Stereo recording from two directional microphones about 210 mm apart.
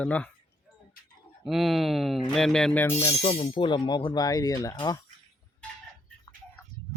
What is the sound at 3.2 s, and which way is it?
Speech, 25° left (ahead or behind).